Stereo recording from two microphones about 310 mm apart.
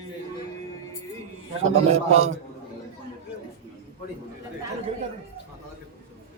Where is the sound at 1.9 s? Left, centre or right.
Right.